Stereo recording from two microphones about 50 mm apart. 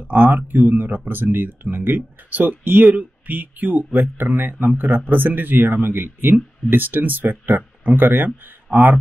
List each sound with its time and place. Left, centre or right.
0.1 s speech: right